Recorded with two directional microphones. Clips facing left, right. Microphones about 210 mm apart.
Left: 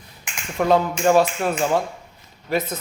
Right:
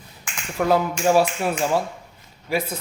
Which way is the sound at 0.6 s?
5° right (ahead or behind).